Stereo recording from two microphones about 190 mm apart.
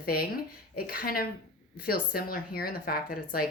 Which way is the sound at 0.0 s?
50° left (ahead or behind).